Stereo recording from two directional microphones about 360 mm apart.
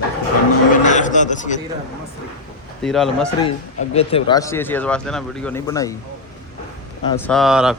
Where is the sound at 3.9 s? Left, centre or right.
Centre.